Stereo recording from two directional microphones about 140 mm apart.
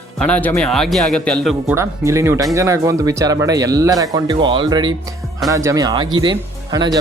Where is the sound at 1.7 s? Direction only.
20° right (ahead or behind).